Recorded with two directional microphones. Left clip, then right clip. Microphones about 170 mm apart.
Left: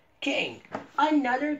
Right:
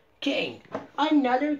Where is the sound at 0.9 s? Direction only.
60° right (ahead or behind).